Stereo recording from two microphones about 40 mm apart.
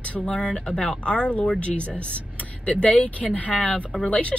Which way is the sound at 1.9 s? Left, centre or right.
Left.